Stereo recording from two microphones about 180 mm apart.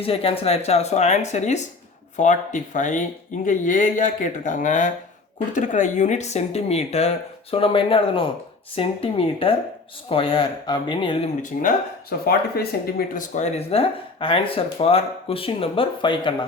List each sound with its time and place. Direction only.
0.0 s speech: 30° left (ahead or behind)
12.2 s speech: 60° left (ahead or behind)
13.3 s speech: 40° left (ahead or behind)